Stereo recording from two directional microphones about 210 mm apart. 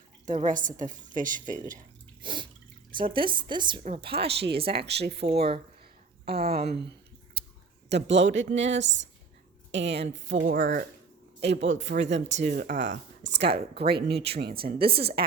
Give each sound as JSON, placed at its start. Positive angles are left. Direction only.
{"t": 0.3, "sound": "a woman's voice", "side_deg": -35}
{"t": 2.2, "sound": "drip", "side_deg": -20}
{"t": 3.1, "sound": "a woman's voice", "side_deg": -25}
{"t": 4.6, "sound": "speech", "side_deg": -50}
{"t": 10.4, "sound": "a woman's voice", "side_deg": -40}
{"t": 11.3, "sound": "speech", "side_deg": -55}
{"t": 14.8, "sound": "a woman's voice", "side_deg": -25}